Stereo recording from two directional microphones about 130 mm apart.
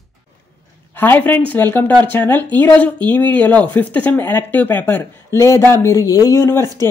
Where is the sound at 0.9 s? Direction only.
15° left (ahead or behind).